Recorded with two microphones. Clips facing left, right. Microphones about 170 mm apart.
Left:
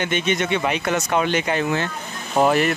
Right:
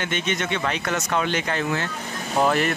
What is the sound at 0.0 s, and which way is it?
Speech, 15° left (ahead or behind).